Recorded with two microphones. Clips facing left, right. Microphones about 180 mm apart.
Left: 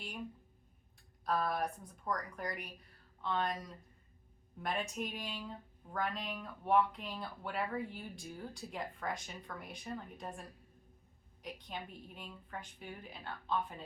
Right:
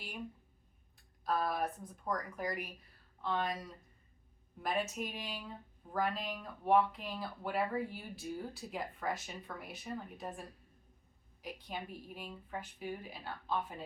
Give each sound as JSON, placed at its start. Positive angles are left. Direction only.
{"t": 1.2, "sound": "speech", "side_deg": -5}
{"t": 4.6, "sound": "speech", "side_deg": -5}
{"t": 11.4, "sound": "speech", "side_deg": -5}